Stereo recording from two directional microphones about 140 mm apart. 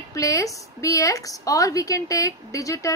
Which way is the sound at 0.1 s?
25° left (ahead or behind).